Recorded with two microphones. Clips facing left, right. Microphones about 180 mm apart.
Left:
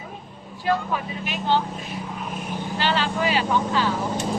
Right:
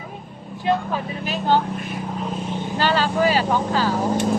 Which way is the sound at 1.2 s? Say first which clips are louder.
Right 4 dB; 40° right (ahead or behind).